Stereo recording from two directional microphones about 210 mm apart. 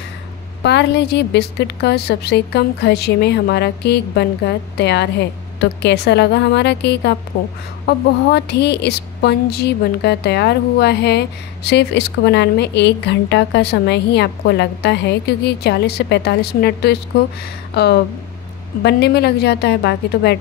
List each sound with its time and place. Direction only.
0.6 s speech: 55° left (ahead or behind)
18.8 s speech: 50° left (ahead or behind)